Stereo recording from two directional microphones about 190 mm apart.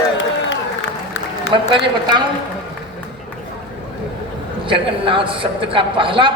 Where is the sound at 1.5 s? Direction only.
25° right (ahead or behind).